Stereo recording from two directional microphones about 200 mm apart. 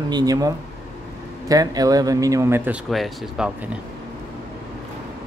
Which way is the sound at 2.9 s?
Centre (ahead or behind).